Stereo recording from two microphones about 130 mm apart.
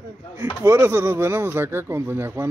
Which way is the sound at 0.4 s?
20° right (ahead or behind).